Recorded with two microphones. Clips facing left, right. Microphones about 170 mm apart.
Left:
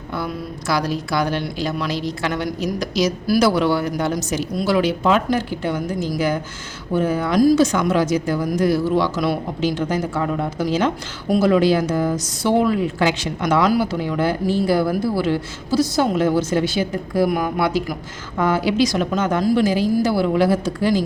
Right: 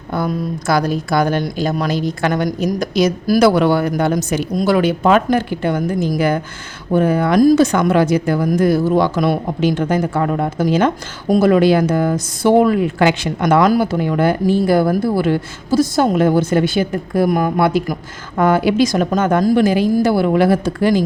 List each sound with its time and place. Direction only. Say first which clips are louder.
0.1 s speech: right 7 dB; 50° right (ahead or behind)